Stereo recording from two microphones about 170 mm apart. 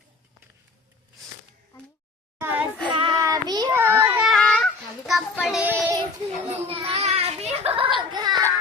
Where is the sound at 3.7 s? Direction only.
15° right (ahead or behind).